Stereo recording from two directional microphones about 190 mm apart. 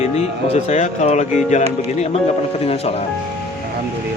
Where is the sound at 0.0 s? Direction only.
35° left (ahead or behind).